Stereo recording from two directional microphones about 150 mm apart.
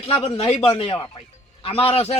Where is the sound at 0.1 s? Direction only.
35° left (ahead or behind).